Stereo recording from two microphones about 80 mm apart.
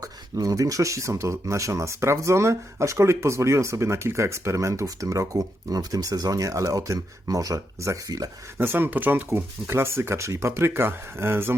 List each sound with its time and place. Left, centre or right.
0.0 s speech: right
8.5 s speech: right